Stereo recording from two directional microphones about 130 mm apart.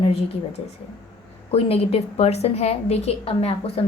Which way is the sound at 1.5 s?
50° left (ahead or behind).